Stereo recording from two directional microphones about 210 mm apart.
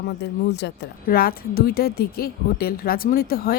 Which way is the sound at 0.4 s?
55° left (ahead or behind).